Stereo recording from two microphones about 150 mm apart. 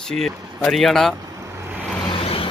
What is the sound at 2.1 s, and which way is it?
Vehicle, 35° left (ahead or behind).